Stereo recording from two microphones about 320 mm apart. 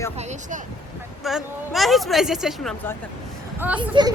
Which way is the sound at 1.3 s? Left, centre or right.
Centre.